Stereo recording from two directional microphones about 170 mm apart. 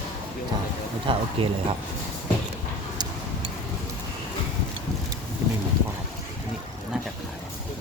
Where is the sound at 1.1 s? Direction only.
30° right (ahead or behind).